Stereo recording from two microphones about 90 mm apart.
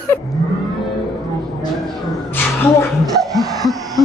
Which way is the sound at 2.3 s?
25° left (ahead or behind).